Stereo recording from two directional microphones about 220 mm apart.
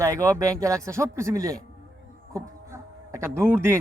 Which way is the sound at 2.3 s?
15° right (ahead or behind).